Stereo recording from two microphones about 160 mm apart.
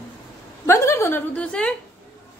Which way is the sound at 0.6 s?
15° left (ahead or behind).